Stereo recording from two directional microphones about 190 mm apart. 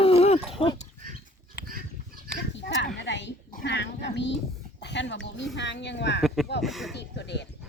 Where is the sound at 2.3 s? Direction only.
65° left (ahead or behind).